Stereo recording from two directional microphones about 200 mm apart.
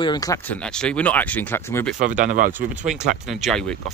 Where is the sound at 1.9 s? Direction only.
40° right (ahead or behind).